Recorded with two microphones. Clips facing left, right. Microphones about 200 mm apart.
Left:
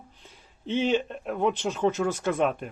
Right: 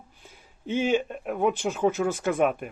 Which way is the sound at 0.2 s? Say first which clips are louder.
Right 1 dB; 10° right (ahead or behind).